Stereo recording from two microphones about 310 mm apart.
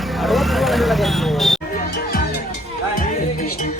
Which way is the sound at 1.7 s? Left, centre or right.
Left.